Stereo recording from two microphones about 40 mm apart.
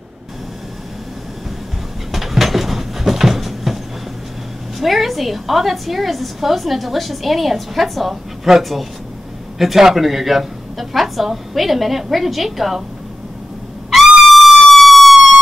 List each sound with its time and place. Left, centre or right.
2.1 s train: centre
4.7 s a woman's voice: centre
13.8 s trumpet: centre